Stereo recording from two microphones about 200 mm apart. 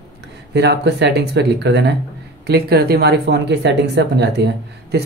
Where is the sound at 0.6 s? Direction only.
55° right (ahead or behind).